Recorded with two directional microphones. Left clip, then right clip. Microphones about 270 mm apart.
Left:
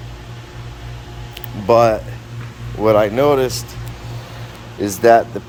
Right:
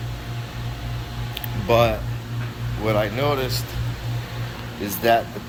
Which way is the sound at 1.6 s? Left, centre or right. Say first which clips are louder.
Left 6 dB; centre.